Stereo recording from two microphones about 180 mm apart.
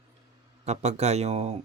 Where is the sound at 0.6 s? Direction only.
40° right (ahead or behind).